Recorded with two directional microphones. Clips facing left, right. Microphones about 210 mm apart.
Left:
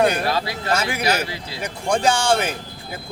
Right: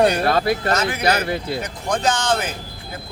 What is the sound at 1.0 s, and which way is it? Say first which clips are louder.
Speech: right 3 dB; 55° right (ahead or behind).